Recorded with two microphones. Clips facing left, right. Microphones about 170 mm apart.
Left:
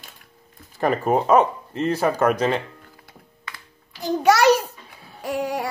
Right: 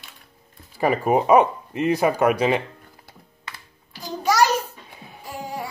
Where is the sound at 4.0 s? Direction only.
70° left (ahead or behind).